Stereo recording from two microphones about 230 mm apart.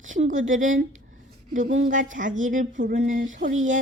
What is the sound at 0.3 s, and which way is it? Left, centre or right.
Speech, right.